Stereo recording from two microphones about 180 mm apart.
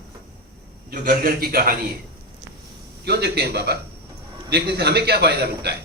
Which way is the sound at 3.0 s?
65° right (ahead or behind).